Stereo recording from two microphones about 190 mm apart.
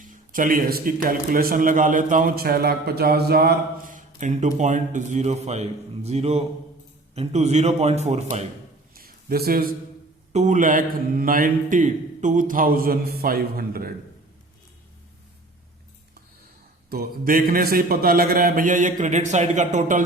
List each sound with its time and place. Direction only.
0.0 s a man's voice: 45° right (ahead or behind)
9.0 s a sound: 50° right (ahead or behind)
10.3 s a man's voice: 40° right (ahead or behind)
16.9 s a man's voice: 50° right (ahead or behind)